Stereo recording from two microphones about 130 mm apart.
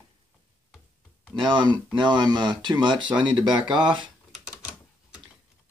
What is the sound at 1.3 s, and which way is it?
Speech, 35° right (ahead or behind).